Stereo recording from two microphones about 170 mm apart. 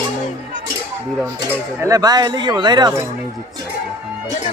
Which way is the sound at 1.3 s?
20° right (ahead or behind).